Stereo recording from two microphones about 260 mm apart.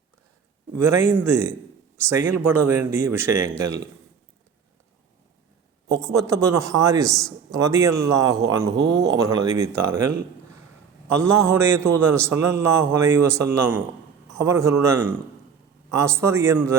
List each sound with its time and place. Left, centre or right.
0.8 s a man's voice: centre
5.9 s a man's voice: centre
7.1 s speech: centre
7.5 s a man's voice: centre
11.1 s a man's voice: centre